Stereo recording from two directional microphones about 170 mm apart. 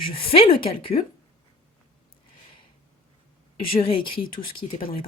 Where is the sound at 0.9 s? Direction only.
35° left (ahead or behind).